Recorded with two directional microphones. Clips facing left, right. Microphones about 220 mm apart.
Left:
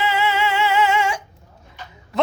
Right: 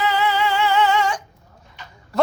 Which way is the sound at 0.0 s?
25° left (ahead or behind).